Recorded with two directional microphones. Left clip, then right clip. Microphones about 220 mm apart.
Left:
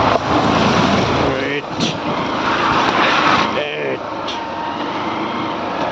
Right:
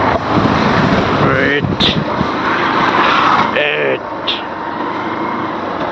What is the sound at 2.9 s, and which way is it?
Vehicle, 45° right (ahead or behind).